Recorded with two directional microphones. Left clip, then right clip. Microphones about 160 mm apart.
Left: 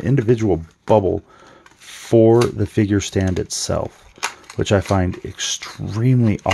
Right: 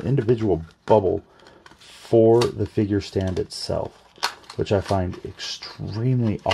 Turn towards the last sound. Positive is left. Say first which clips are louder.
# left 6 dB
turn(degrees=40)  # may be behind; listen again after turning